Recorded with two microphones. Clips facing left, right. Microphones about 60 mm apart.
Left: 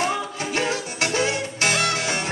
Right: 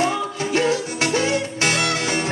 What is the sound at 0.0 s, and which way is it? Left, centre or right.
Music, right.